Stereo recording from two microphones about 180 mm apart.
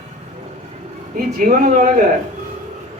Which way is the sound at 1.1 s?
50° right (ahead or behind).